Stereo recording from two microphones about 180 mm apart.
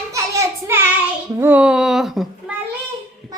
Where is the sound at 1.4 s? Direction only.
10° right (ahead or behind).